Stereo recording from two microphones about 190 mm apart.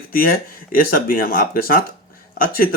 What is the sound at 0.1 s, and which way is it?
Speech, 50° left (ahead or behind).